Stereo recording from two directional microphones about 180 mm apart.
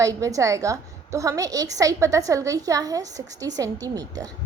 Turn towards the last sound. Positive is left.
turn(degrees=-20)  # may be behind; listen again after turning